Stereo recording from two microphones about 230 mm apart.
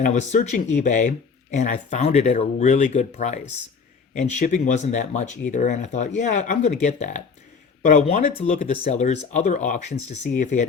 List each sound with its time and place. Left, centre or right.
0.0 s speech: left